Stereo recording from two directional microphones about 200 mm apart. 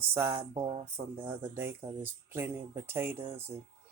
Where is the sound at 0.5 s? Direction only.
30° right (ahead or behind).